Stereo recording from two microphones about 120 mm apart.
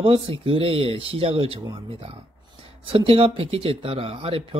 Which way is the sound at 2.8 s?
50° right (ahead or behind).